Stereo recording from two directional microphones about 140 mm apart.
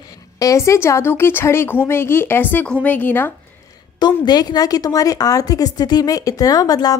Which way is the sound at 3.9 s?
30° left (ahead or behind).